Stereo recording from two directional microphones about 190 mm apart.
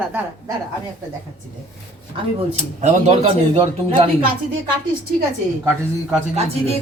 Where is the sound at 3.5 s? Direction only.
30° right (ahead or behind).